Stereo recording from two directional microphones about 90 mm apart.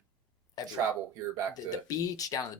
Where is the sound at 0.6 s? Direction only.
45° left (ahead or behind).